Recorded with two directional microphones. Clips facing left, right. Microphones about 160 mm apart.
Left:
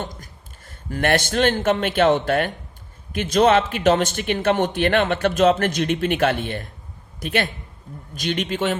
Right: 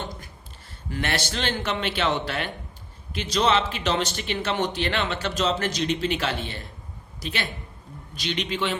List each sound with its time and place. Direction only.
0.0 s a man's voice: 45° left (ahead or behind)